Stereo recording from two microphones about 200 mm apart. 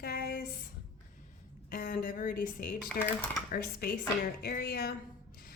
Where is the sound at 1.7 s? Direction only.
45° left (ahead or behind).